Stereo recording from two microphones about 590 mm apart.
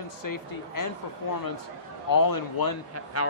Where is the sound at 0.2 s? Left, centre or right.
Left.